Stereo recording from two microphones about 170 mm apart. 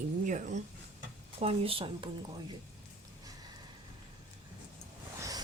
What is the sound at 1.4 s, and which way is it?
Speech, 35° right (ahead or behind).